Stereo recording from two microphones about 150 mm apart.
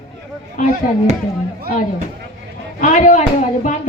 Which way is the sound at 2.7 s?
55° left (ahead or behind).